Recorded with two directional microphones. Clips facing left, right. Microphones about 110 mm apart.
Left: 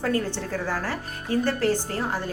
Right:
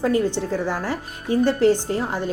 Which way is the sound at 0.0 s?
20° right (ahead or behind).